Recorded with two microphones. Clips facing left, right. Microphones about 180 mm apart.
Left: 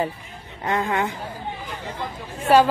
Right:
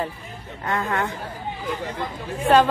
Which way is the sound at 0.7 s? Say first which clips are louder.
Left 2 dB; 20° left (ahead or behind).